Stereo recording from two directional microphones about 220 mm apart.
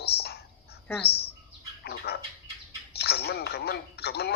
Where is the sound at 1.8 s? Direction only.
45° left (ahead or behind).